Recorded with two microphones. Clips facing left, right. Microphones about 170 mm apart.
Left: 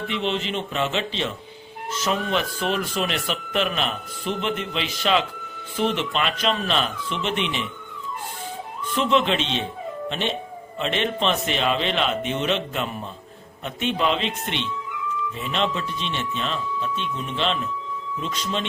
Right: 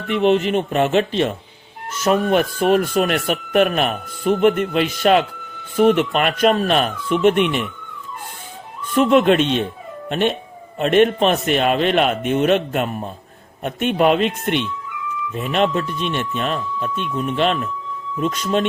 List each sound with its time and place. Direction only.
0.1 s speech: 50° right (ahead or behind)
8.9 s speech: 50° right (ahead or behind)